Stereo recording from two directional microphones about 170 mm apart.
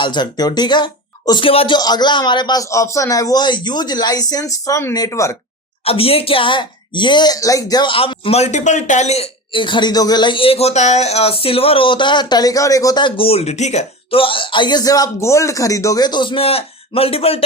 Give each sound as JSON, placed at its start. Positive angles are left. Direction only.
{"t": 0.0, "sound": "a man's voice", "side_deg": 25}
{"t": 5.8, "sound": "a woman's voice", "side_deg": 35}